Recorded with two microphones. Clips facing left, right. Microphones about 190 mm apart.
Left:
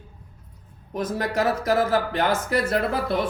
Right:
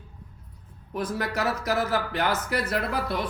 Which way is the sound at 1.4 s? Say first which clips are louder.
Left 6 dB; 50° left (ahead or behind).